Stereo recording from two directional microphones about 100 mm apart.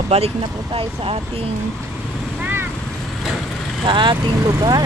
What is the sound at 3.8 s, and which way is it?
Speech, 55° right (ahead or behind).